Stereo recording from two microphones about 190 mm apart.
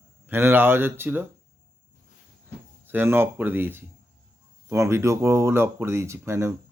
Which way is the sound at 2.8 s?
10° right (ahead or behind).